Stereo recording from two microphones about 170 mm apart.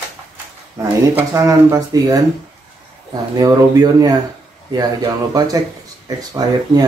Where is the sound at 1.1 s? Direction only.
20° right (ahead or behind).